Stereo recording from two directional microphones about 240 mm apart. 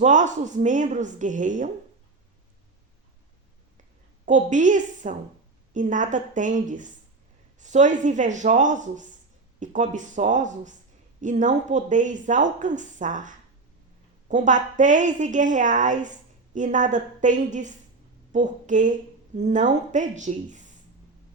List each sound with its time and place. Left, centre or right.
0.0 s speech: right
4.3 s a woman's voice: right